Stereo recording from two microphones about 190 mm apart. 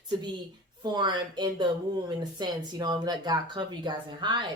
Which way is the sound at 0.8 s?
25° right (ahead or behind).